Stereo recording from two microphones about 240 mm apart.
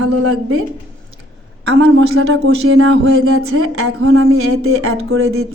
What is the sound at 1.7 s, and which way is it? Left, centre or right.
Speech, right.